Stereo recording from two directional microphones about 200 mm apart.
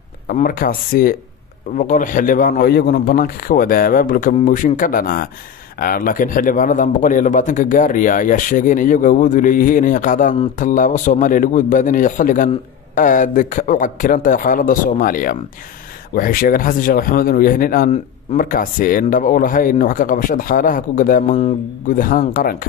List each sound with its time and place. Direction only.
0.3 s a man's voice: 45° left (ahead or behind)